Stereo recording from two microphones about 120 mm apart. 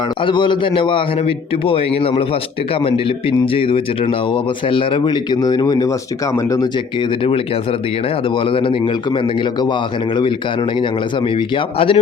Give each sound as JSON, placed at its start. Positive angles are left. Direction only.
{"t": 0.2, "sound": "a man's voice", "side_deg": 40}
{"t": 7.3, "sound": "a man's voice", "side_deg": 50}
{"t": 11.3, "sound": "a man's voice", "side_deg": 45}